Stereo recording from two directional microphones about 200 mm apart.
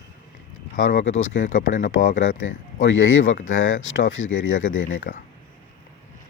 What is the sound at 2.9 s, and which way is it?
Speech, 75° left (ahead or behind).